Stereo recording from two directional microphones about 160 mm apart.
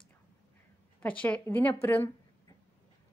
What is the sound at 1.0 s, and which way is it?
A woman's voice, 10° left (ahead or behind).